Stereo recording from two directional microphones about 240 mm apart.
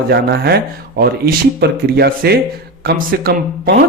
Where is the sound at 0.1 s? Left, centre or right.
Right.